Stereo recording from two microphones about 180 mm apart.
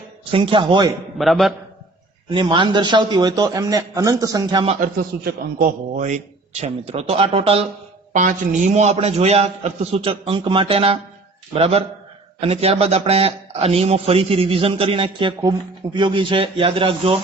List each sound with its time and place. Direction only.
0.3 s a man's voice: 30° right (ahead or behind)
1.2 s a man's voice: centre (ahead or behind)
2.3 s a man's voice: 30° right (ahead or behind)
4.6 s a man's voice: 40° right (ahead or behind)
5.2 s a man's voice: 50° right (ahead or behind); by 7.7 s 35° right (ahead or behind)
8.1 s a man's voice: 45° right (ahead or behind)